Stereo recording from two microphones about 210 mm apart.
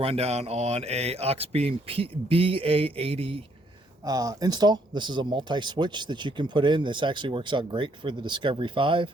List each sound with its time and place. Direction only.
0.0 s speech: 30° right (ahead or behind)